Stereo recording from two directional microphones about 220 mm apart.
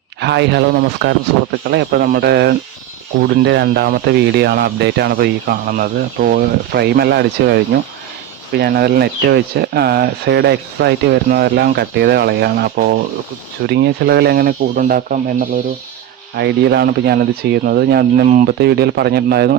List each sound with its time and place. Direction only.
0.2 s speech: 50° right (ahead or behind)
16.4 s speech: 50° right (ahead or behind)